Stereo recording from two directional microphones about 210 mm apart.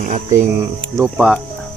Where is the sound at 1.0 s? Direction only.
5° right (ahead or behind).